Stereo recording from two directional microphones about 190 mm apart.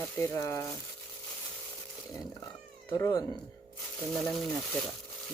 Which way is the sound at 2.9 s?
20° left (ahead or behind).